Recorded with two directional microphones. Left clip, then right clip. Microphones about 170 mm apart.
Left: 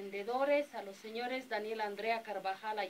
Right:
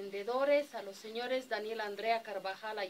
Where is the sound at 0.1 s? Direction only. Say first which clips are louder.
Right 2 dB; centre (ahead or behind).